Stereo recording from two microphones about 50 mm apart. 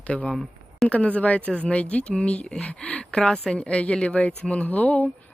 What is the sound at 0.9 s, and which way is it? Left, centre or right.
Speech, left.